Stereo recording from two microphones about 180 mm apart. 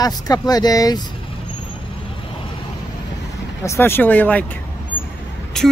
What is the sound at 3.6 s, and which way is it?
Speech, 15° left (ahead or behind).